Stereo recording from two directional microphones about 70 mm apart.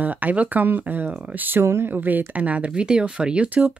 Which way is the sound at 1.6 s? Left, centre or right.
Right.